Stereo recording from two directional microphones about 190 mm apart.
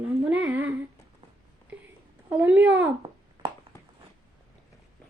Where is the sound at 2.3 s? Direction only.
10° right (ahead or behind).